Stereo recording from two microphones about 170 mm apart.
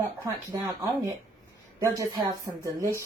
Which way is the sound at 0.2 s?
20° right (ahead or behind).